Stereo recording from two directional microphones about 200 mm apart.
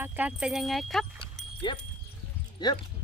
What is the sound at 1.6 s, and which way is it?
Speech, 25° left (ahead or behind).